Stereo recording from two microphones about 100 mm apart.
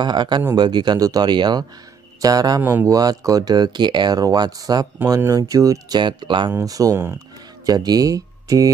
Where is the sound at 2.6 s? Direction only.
20° right (ahead or behind).